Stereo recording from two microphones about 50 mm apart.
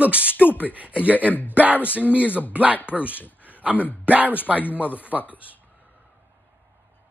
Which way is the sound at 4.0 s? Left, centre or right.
Right.